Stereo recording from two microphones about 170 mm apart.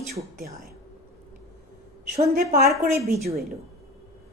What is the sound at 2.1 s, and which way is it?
Speech, 50° right (ahead or behind).